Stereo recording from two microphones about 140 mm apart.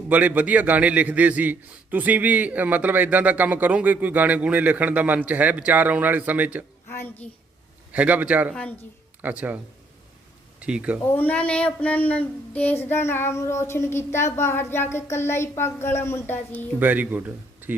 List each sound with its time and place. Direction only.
0.1 s a man's voice: 10° right (ahead or behind)
6.9 s speech: 15° left (ahead or behind)
7.9 s a man's voice: 10° right (ahead or behind)
10.6 s speech: 10° right (ahead or behind)
11.0 s speech: 15° left (ahead or behind)
16.8 s speech: 10° right (ahead or behind)